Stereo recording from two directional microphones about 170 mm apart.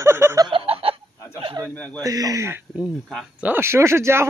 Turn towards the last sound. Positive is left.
turn(degrees=-15)  # may be behind; listen again after turning